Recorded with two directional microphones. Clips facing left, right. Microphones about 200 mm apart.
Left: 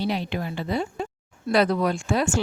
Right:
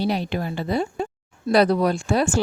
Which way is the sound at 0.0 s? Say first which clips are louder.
Right 3 dB; 40° right (ahead or behind).